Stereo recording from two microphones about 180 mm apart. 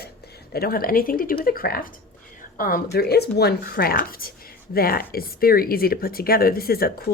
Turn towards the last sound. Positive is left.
turn(degrees=55)  # may be behind; listen again after turning